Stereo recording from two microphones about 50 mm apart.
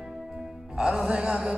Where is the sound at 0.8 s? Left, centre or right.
Centre.